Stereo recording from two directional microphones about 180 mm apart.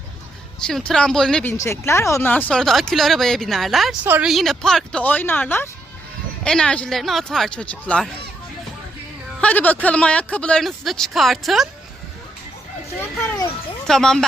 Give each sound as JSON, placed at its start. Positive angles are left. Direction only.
{"t": 0.6, "sound": "speech", "side_deg": 5}
{"t": 1.5, "sound": "speech", "side_deg": 15}
{"t": 9.4, "sound": "speech", "side_deg": 10}
{"t": 13.0, "sound": "a child's voice", "side_deg": 20}
{"t": 13.8, "sound": "speech", "side_deg": 5}